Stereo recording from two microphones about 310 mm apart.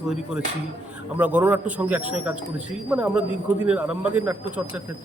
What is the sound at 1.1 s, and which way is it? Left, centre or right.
Speech, centre.